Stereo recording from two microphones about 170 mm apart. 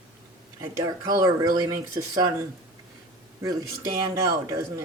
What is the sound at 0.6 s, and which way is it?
Speech, 20° right (ahead or behind).